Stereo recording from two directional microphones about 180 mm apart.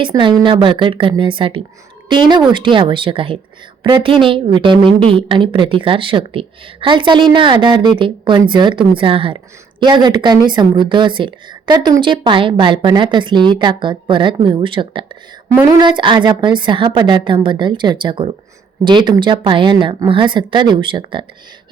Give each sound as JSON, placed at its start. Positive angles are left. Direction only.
{"t": 0.0, "sound": "a woman's voice", "side_deg": -25}